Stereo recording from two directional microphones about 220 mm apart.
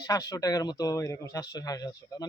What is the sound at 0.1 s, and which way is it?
Speech, 15° left (ahead or behind).